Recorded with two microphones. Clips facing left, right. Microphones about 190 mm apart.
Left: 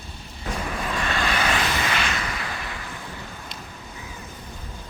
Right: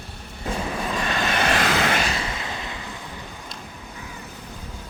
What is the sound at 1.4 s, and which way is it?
Vehicle, 65° right (ahead or behind).